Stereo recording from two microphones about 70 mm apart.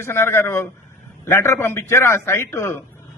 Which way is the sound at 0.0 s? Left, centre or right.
Left.